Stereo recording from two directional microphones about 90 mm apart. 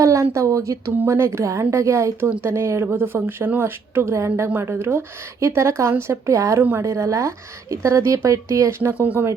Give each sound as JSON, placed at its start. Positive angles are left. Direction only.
{"t": 0.0, "sound": "speech", "side_deg": -35}
{"t": 6.6, "sound": "speech", "side_deg": -20}
{"t": 6.8, "sound": "speech", "side_deg": -35}